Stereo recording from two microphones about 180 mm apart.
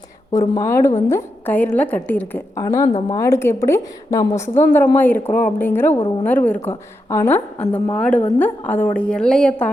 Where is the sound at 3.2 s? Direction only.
15° left (ahead or behind).